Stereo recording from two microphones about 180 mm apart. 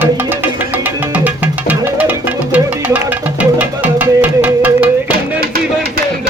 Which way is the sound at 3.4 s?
10° right (ahead or behind).